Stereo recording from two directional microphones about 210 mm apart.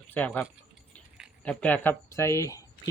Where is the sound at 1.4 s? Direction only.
10° left (ahead or behind).